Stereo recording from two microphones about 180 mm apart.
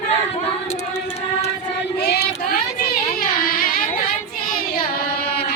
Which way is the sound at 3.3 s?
55° left (ahead or behind).